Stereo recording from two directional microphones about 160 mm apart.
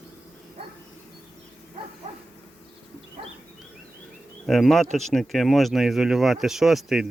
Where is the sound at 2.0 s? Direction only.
50° right (ahead or behind).